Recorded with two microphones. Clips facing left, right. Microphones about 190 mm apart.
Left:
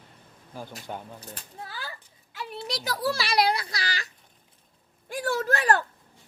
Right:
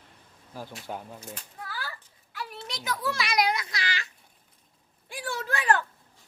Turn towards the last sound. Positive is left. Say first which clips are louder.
# left 3 dB
turn(degrees=40)  # may be behind; listen again after turning